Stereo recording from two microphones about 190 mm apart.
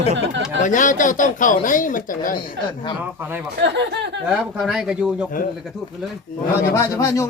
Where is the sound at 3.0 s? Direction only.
10° right (ahead or behind).